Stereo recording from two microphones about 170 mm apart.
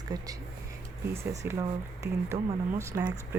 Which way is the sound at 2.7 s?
15° right (ahead or behind).